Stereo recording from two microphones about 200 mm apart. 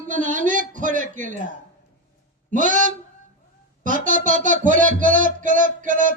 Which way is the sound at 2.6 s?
40° right (ahead or behind).